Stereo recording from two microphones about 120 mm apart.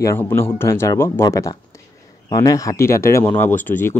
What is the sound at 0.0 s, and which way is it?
Speech, 20° left (ahead or behind).